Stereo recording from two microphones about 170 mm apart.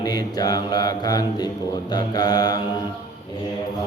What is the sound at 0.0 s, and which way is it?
Mantra, 20° left (ahead or behind).